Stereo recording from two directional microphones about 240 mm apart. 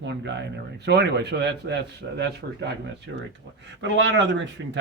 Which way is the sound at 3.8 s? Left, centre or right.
Right.